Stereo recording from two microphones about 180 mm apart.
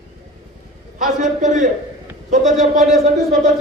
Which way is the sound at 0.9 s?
45° right (ahead or behind).